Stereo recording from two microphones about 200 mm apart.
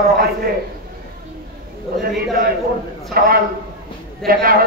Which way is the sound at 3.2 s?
50° right (ahead or behind).